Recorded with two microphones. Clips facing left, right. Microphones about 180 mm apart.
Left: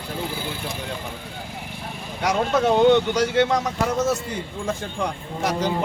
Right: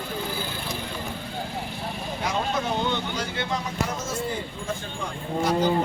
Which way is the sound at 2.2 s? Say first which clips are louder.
Left 7 dB; 85° left.